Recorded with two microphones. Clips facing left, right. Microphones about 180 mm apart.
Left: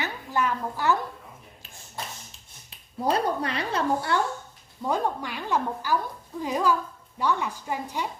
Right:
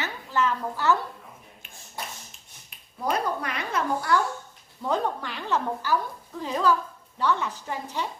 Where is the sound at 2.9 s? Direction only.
30° left (ahead or behind).